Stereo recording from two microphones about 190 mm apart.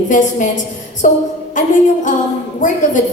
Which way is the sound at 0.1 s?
40° left (ahead or behind).